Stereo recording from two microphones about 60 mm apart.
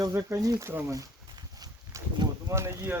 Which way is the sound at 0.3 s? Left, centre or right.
Right.